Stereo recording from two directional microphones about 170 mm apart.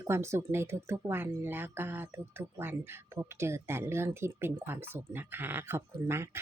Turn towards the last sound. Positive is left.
turn(degrees=-15)  # may be behind; listen again after turning